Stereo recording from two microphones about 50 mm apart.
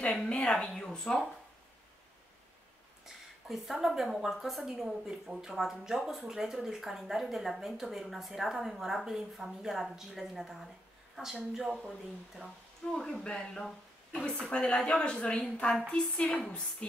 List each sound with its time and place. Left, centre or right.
0.0 s speech: centre
0.8 s speech: centre
3.1 s a woman's voice: centre
12.9 s speech: centre